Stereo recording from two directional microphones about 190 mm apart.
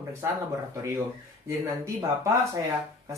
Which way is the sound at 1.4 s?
15° right (ahead or behind).